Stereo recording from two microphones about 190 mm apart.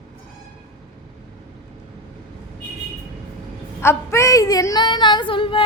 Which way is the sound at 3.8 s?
15° left (ahead or behind).